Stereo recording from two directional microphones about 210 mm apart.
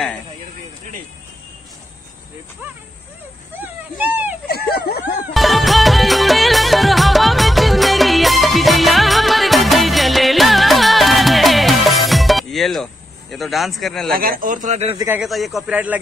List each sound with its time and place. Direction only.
3.5 s speech: 10° right (ahead or behind)
4.5 s a sound: 50° left (ahead or behind)
5.3 s music: centre (ahead or behind)
14.1 s speech: 45° right (ahead or behind)
15.0 s a man's voice: 10° right (ahead or behind)